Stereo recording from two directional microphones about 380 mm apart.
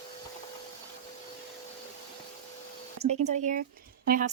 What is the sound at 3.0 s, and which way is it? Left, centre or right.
A woman's voice, centre.